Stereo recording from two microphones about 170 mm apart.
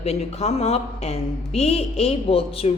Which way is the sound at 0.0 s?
40° left (ahead or behind).